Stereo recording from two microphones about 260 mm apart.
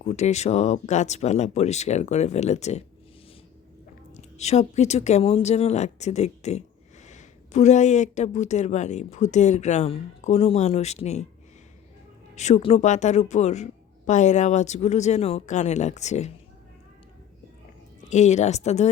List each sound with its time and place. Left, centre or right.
0.0 s speech: left
4.2 s speech: left
12.4 s speech: left
18.1 s speech: left